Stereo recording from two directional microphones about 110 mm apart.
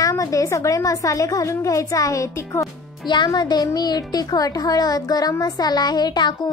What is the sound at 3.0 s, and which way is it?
Speech, 40° left (ahead or behind).